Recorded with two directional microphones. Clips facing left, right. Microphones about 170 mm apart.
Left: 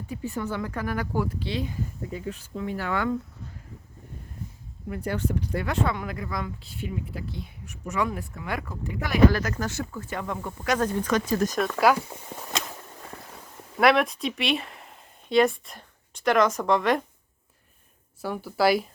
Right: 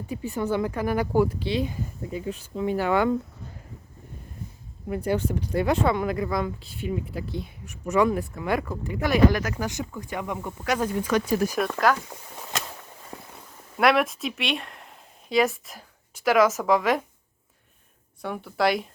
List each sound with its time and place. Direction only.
0.1 s speech: 15° right (ahead or behind)
4.9 s speech: 15° right (ahead or behind)
7.9 s speech: 30° right (ahead or behind)
9.4 s speech: 10° right (ahead or behind)
13.7 s speech: centre (ahead or behind)
18.2 s speech: 5° left (ahead or behind)